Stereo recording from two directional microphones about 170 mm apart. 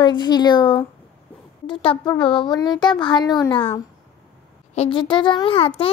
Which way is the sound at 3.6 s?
15° left (ahead or behind).